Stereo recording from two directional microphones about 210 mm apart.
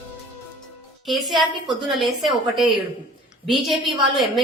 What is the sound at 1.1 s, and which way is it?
Speech, centre (ahead or behind).